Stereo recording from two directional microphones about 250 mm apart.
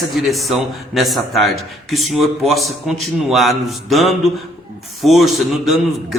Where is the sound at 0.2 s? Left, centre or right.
Centre.